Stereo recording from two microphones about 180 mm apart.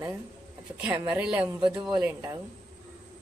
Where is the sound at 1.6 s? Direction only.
25° right (ahead or behind).